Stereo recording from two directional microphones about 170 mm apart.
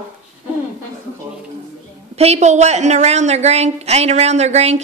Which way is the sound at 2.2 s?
40° right (ahead or behind).